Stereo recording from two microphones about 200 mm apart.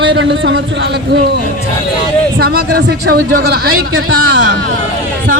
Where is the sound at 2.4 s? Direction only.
50° right (ahead or behind).